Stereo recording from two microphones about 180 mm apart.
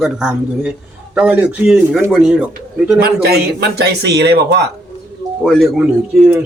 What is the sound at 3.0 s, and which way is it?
Speech, 60° right (ahead or behind).